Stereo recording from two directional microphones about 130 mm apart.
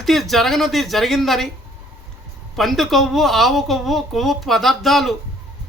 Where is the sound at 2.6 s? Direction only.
Centre (ahead or behind).